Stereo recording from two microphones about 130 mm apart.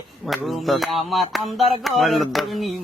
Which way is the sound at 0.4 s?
Centre (ahead or behind).